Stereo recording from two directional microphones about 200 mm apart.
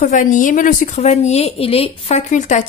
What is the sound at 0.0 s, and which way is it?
A woman's voice, 40° left (ahead or behind).